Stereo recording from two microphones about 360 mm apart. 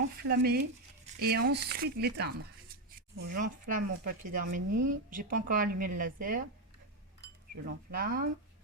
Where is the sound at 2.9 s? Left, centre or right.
Right.